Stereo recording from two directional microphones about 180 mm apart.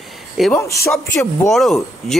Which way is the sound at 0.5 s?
15° left (ahead or behind).